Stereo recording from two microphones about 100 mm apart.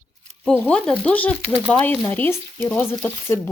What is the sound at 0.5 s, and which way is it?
A woman's voice, 10° left (ahead or behind).